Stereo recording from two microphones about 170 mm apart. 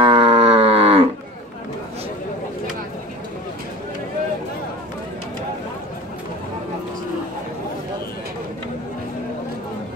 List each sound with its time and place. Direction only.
0.0 s livestock: 30° right (ahead or behind)